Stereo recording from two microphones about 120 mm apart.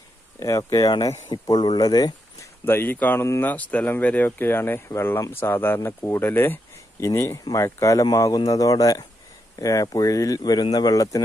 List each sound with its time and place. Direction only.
0.4 s speech: 25° left (ahead or behind)
2.6 s speech: 15° left (ahead or behind)